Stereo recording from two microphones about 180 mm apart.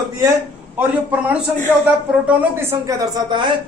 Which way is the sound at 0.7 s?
10° right (ahead or behind).